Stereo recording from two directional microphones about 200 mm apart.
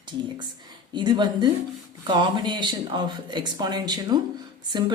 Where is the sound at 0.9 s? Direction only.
20° right (ahead or behind).